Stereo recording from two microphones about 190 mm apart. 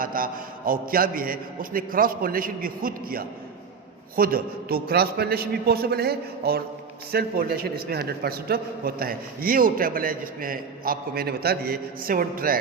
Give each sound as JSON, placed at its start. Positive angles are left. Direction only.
{"t": 0.0, "sound": "a man's voice", "side_deg": -50}